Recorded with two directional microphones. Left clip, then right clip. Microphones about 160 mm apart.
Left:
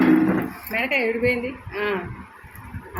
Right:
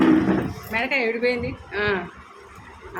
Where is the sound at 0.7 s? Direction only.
10° left (ahead or behind).